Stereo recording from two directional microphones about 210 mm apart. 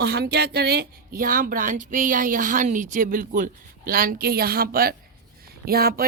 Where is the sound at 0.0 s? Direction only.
50° right (ahead or behind).